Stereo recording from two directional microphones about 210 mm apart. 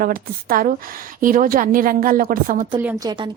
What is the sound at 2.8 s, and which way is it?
Speech, 20° right (ahead or behind).